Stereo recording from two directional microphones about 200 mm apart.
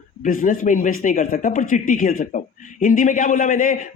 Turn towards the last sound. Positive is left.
turn(degrees=40)  # may be behind; listen again after turning